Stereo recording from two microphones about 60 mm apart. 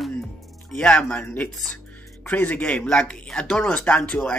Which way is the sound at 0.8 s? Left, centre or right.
Centre.